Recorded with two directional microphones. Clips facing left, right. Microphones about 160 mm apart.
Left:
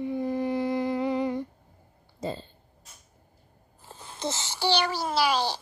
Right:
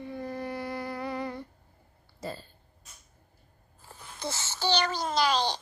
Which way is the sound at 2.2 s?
25° left (ahead or behind).